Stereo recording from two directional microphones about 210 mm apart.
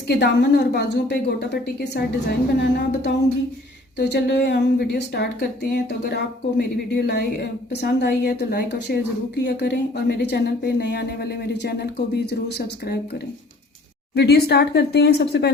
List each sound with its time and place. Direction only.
0.1 s a woman's voice: 50° left (ahead or behind)
14.2 s a woman's voice: 50° left (ahead or behind)